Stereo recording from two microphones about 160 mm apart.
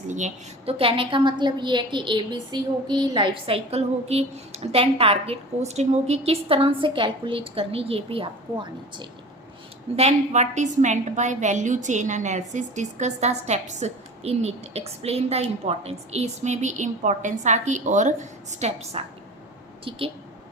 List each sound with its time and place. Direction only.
0.1 s a woman's voice: 45° right (ahead or behind)